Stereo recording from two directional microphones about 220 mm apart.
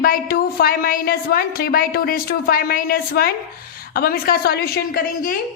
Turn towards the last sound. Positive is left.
turn(degrees=40)  # may be behind; listen again after turning